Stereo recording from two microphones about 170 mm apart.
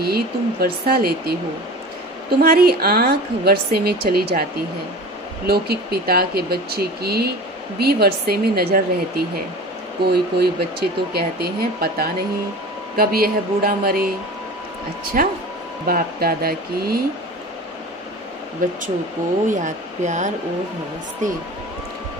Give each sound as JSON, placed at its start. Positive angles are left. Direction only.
{"t": 0.0, "sound": "speech", "side_deg": -65}
{"t": 2.4, "sound": "speech", "side_deg": -60}
{"t": 5.5, "sound": "speech", "side_deg": -65}
{"t": 15.2, "sound": "speech", "side_deg": -55}
{"t": 19.5, "sound": "speech", "side_deg": -45}